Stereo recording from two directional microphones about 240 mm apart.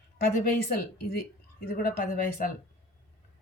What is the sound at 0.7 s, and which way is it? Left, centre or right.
Speech, left.